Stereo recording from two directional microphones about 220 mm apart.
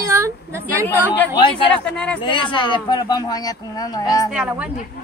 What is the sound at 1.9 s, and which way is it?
Speech, 5° left (ahead or behind).